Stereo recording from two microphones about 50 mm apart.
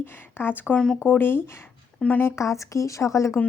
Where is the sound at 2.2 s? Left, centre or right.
Left.